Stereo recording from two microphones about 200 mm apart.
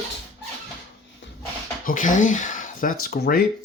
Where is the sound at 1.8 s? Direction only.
40° left (ahead or behind).